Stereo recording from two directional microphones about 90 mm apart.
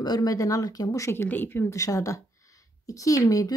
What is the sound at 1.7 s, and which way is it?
Speech, 40° left (ahead or behind).